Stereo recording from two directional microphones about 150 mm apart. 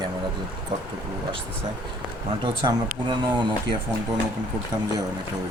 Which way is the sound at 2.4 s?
30° right (ahead or behind).